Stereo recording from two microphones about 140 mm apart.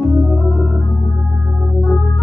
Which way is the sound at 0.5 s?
5° left (ahead or behind).